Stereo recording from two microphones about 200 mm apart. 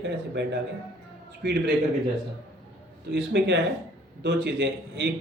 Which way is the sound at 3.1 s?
60° right (ahead or behind).